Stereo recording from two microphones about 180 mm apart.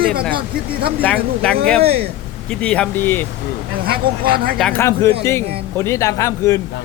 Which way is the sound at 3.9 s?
55° right (ahead or behind).